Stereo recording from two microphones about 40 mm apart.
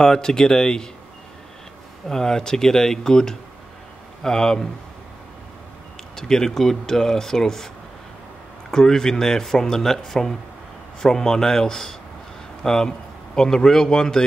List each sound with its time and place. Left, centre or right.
0.0 s speech: centre
2.0 s speech: centre
6.1 s speech: centre